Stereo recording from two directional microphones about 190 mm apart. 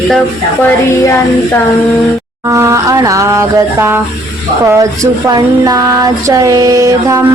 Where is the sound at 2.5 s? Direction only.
15° right (ahead or behind).